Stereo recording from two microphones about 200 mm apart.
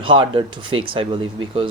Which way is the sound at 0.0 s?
25° right (ahead or behind).